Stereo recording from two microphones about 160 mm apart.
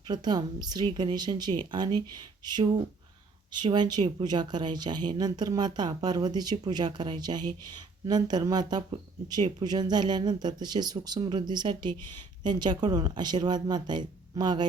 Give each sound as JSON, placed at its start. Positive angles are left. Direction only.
{"t": 0.1, "sound": "speech", "side_deg": -25}